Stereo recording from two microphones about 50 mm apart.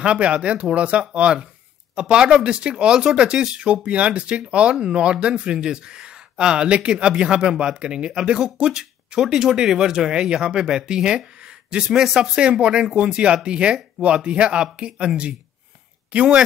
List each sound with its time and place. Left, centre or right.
0.0 s speech: right